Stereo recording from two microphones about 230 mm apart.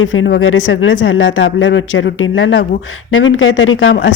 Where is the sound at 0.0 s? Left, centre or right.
Left.